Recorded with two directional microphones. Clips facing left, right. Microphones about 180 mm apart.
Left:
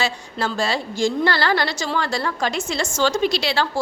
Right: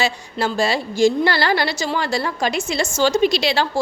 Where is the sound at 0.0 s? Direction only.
10° right (ahead or behind).